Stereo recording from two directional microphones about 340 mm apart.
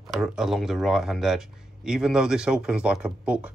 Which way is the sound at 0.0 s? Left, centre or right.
Centre.